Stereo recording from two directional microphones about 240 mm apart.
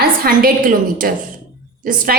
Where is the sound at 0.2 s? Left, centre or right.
Right.